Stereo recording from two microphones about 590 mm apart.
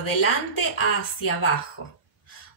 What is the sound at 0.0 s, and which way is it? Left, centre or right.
A woman's voice, left.